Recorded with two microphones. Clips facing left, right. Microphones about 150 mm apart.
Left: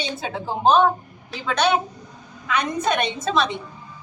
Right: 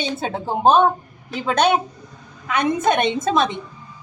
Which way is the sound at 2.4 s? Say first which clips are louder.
Right 4 dB; 50° right (ahead or behind).